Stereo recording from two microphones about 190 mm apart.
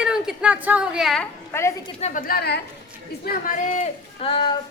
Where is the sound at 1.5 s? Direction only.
15° left (ahead or behind).